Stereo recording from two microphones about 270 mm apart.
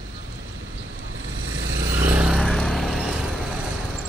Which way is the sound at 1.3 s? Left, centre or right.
Right.